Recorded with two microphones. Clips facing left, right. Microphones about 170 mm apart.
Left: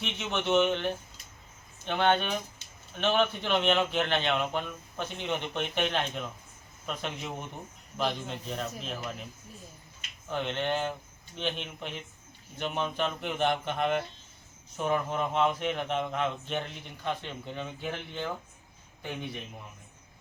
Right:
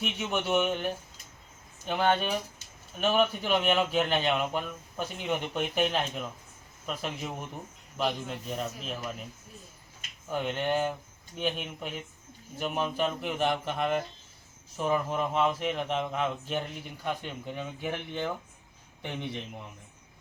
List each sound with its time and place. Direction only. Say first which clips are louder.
0.0 s a man's voice: right 1 dB; 10° right (ahead or behind)
1.9 s a man's voice: even; 5° right (ahead or behind)
10.2 s a man's voice: right 1 dB; 10° right (ahead or behind)